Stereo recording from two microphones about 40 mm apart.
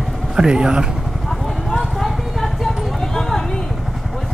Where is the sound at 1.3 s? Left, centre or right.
Centre.